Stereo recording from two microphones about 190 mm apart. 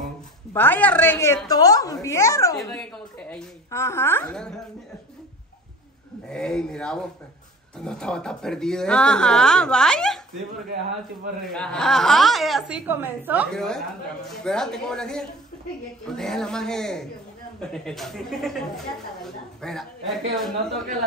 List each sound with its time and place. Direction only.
0.5 s a woman's voice: 10° left (ahead or behind)
2.7 s a woman's voice: 5° left (ahead or behind)
6.2 s speech: 5° left (ahead or behind)
11.5 s speech: 5° left (ahead or behind)
13.5 s speech: 5° left (ahead or behind)